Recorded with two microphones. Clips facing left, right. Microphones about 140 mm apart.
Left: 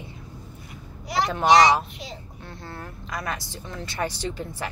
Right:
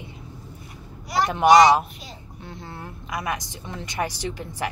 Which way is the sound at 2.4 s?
20° right (ahead or behind).